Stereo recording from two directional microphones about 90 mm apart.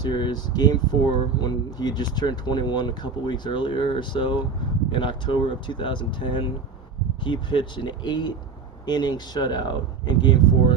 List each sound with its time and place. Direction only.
0.0 s speech: 55° left (ahead or behind)